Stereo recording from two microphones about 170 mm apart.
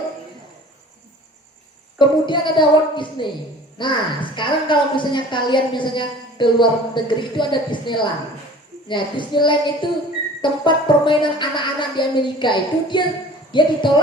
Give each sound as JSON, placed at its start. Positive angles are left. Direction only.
{"t": 2.0, "sound": "a woman's voice", "side_deg": 25}